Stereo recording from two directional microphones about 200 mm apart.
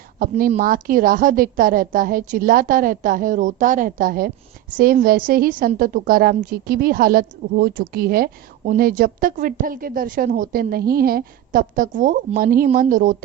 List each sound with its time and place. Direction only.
0.2 s a woman's voice: 45° right (ahead or behind)